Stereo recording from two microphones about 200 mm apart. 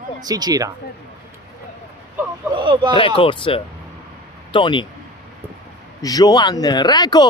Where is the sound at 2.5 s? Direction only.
25° right (ahead or behind).